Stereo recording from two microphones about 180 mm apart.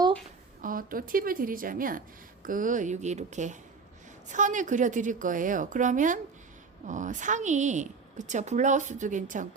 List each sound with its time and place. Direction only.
0.6 s speech: 50° right (ahead or behind)